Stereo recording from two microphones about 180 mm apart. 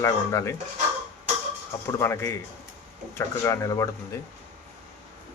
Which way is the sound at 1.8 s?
15° left (ahead or behind).